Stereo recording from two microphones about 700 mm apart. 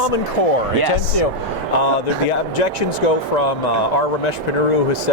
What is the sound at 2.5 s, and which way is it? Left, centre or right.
Speech, left.